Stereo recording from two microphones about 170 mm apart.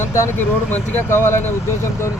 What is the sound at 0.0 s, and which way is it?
Speech, 15° left (ahead or behind).